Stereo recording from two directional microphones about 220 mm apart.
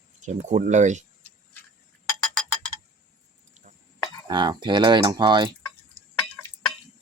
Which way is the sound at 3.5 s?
35° right (ahead or behind).